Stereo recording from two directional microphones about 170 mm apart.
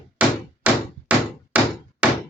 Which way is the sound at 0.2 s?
10° right (ahead or behind).